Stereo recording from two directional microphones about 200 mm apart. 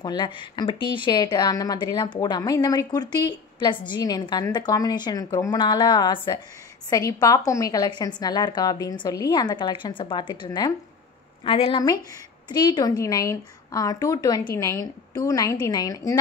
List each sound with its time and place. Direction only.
0.0 s a woman's voice: 25° left (ahead or behind)